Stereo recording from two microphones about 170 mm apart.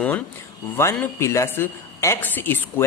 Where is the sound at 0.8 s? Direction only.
15° left (ahead or behind).